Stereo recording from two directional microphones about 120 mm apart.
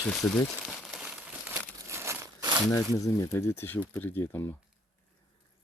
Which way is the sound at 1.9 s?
20° right (ahead or behind).